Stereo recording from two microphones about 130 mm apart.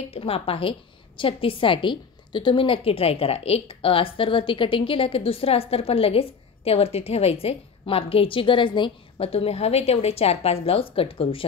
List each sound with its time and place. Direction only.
0.1 s a woman's voice: 50° left (ahead or behind)